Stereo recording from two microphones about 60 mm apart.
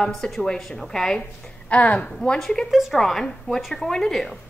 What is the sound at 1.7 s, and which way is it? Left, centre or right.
Speech, left.